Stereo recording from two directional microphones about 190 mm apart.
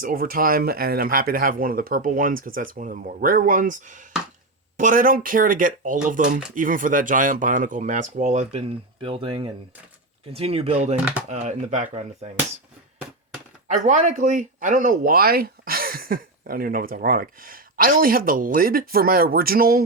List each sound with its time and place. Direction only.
0.0 s speech: 50° right (ahead or behind)
13.7 s speech: 40° right (ahead or behind)